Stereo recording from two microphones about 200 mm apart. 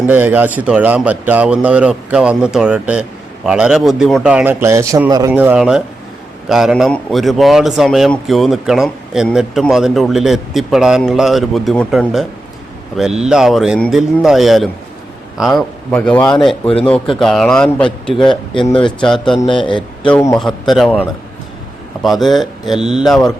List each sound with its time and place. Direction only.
0.0 s a man's voice: 10° right (ahead or behind)
18.5 s a man's voice: 25° left (ahead or behind)
20.7 s a man's voice: centre (ahead or behind)